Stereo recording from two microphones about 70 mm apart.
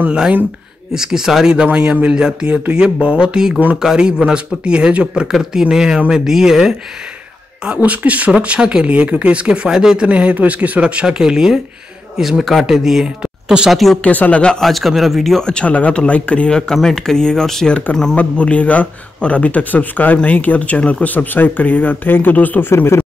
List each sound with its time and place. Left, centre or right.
0.9 s speech: centre
7.6 s speech: centre
13.7 s speech: centre
14.0 s speech: left
14.6 s speech: centre; by 23.0 s left